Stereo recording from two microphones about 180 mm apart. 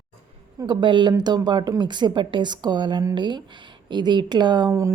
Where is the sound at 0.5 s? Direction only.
25° right (ahead or behind).